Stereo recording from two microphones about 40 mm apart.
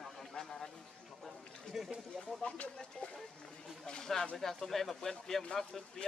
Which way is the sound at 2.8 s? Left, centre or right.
Centre.